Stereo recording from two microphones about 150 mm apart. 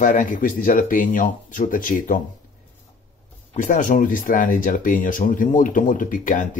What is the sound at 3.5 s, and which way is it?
Speech, 55° left (ahead or behind).